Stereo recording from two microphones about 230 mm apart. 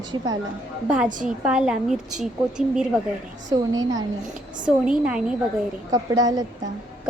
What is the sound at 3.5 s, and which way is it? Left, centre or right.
Speech, centre.